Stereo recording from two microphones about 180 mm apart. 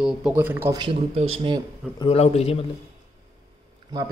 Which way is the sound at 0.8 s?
30° right (ahead or behind).